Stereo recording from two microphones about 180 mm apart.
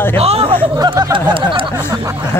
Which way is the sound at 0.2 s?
35° right (ahead or behind).